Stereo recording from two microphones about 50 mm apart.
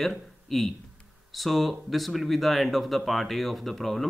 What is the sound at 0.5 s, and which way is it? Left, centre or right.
Speech, centre.